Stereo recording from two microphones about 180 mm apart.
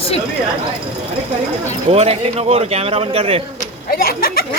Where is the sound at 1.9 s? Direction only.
35° right (ahead or behind).